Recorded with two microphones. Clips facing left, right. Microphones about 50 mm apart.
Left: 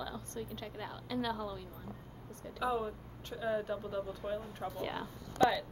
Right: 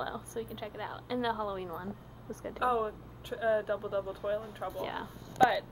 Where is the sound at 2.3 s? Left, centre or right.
Right.